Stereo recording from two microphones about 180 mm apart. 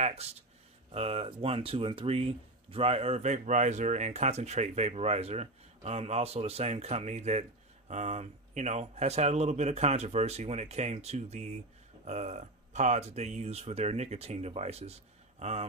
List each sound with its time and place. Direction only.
0.0 s speech: 35° right (ahead or behind)